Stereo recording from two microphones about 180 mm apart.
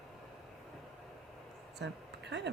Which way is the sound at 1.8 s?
75° right (ahead or behind).